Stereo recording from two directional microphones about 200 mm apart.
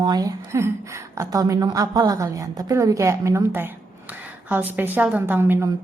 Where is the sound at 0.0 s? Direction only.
20° right (ahead or behind).